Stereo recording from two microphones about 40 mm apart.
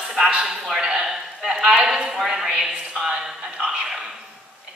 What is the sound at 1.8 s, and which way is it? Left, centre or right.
Speech, right.